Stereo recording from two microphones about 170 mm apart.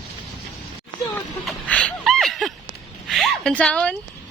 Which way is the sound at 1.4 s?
5° left (ahead or behind).